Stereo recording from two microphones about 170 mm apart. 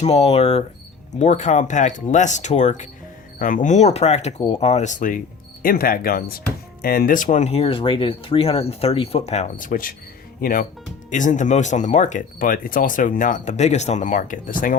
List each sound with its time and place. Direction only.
0.0 s speech: 40° left (ahead or behind)
5.6 s speech: 60° left (ahead or behind)
11.1 s speech: 45° left (ahead or behind)